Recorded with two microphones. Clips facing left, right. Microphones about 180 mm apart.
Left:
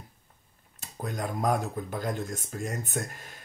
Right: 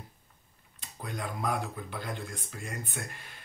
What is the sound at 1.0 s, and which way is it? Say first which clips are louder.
Speech: left 5 dB; 45° left (ahead or behind).